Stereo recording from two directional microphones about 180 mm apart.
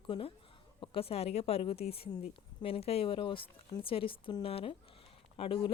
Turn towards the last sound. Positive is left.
turn(degrees=30)  # may be behind; listen again after turning